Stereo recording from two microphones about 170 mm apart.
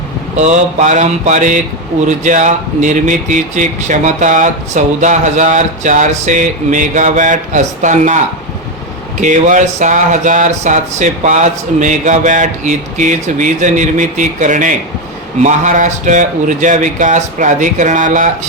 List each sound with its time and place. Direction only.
0.3 s speech: 45° right (ahead or behind)
9.2 s speech: 45° right (ahead or behind)